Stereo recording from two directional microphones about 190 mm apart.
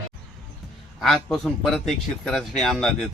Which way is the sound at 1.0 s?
Centre (ahead or behind).